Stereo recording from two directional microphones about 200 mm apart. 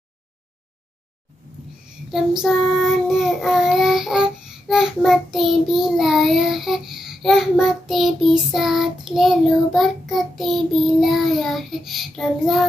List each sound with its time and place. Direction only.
2.0 s child singing: centre (ahead or behind)